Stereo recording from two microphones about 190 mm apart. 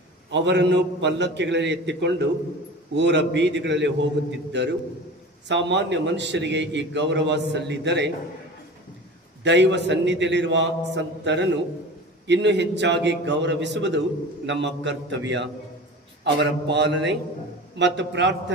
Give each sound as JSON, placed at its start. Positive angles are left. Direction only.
{"t": 0.3, "sound": "a man's voice", "side_deg": -65}
{"t": 9.4, "sound": "a man's voice", "side_deg": -65}